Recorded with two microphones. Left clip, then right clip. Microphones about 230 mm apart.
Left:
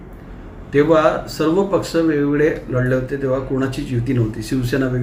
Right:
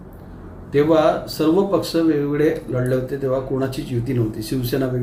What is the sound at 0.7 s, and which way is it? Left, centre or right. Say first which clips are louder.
Speech: left 2 dB; centre.